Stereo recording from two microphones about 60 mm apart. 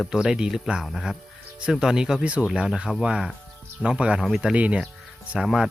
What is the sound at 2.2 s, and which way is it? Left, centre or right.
Speech, right.